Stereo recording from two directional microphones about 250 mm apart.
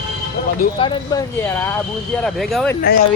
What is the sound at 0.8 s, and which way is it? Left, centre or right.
A man's voice, centre.